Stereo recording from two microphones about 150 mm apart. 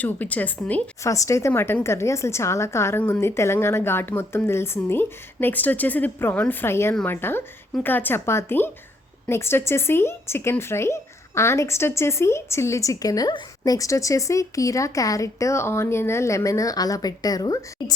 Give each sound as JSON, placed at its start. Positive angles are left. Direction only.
{"t": 0.0, "sound": "a woman's voice", "side_deg": 10}
{"t": 1.0, "sound": "a woman's voice", "side_deg": 20}